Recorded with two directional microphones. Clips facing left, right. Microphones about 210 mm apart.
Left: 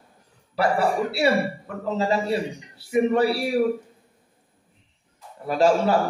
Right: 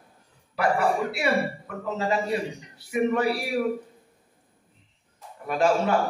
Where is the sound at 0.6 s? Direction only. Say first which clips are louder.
Left 2 dB; 35° left (ahead or behind).